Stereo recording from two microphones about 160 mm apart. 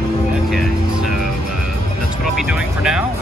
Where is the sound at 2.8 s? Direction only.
5° right (ahead or behind).